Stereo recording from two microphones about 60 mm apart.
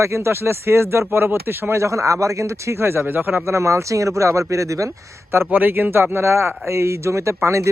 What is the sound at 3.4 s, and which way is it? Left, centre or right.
Speech, right.